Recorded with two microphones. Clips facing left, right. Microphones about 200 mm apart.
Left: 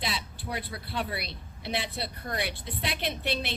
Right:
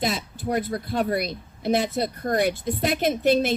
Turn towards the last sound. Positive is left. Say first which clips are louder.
# right 12 dB
turn(degrees=-45)  # may be behind; listen again after turning